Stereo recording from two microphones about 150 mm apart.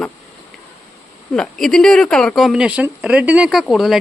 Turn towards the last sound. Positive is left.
turn(degrees=0)  # may be behind; listen again after turning